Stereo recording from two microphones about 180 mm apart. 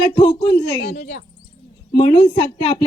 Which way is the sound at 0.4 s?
65° left (ahead or behind).